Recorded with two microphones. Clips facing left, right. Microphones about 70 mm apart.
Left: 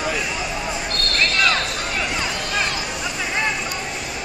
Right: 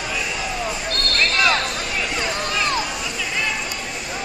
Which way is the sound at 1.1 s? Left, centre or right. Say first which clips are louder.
Right 1 dB; centre.